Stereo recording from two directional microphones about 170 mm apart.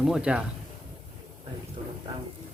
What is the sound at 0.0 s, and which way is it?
Speech, 5° right (ahead or behind).